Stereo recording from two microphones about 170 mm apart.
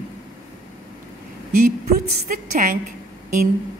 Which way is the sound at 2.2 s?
50° right (ahead or behind).